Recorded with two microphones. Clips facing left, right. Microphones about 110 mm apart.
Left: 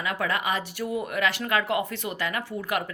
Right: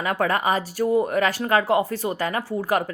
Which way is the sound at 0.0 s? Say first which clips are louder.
Right 6 dB; 45° right (ahead or behind).